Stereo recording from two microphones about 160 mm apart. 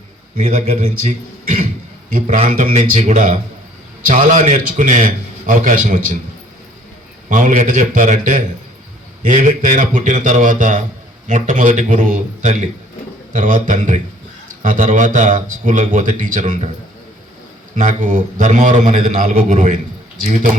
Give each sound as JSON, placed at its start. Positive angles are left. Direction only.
{"t": 0.3, "sound": "a man's voice", "side_deg": -45}
{"t": 7.3, "sound": "a man's voice", "side_deg": -55}
{"t": 17.7, "sound": "a man's voice", "side_deg": -50}